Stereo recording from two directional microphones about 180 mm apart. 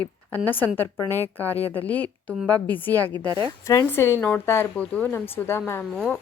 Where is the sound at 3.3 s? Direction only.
25° right (ahead or behind).